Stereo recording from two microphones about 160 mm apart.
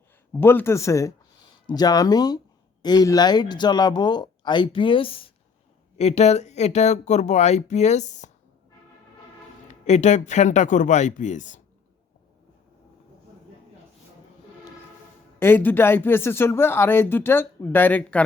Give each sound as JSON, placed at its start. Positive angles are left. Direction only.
{"t": 0.3, "sound": "speech", "side_deg": 15}
{"t": 9.6, "sound": "speech", "side_deg": 45}
{"t": 15.4, "sound": "speech", "side_deg": 10}